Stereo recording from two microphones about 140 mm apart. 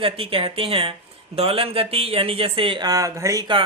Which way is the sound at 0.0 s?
40° right (ahead or behind).